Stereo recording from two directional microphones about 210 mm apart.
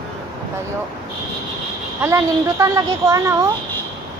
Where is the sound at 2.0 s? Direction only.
15° right (ahead or behind).